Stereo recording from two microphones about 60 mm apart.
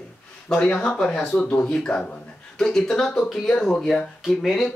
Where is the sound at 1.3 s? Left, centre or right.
Centre.